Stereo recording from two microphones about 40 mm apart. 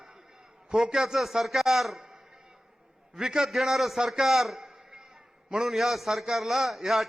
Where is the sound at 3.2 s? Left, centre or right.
Centre.